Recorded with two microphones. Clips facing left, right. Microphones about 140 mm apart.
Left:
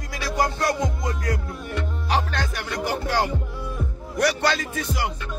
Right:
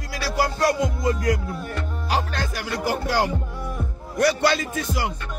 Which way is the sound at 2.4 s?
10° right (ahead or behind).